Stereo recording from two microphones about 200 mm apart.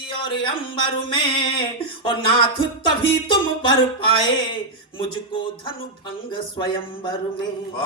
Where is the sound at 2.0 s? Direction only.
25° left (ahead or behind).